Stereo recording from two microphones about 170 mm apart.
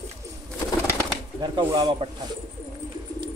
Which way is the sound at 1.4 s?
25° right (ahead or behind).